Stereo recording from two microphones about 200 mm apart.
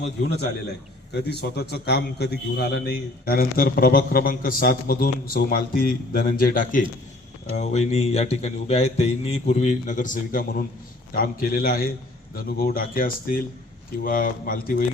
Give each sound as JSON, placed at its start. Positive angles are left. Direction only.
{"t": 1.1, "sound": "a man's voice", "side_deg": 55}